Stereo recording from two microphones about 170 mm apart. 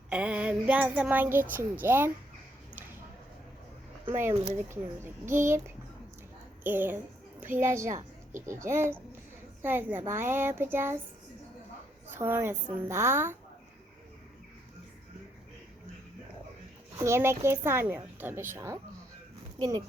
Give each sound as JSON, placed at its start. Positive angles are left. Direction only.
{"t": 0.1, "sound": "a child's voice", "side_deg": -5}
{"t": 4.1, "sound": "a child's voice", "side_deg": -15}
{"t": 12.1, "sound": "a woman's voice", "side_deg": -15}
{"t": 17.0, "sound": "a child's voice", "side_deg": -15}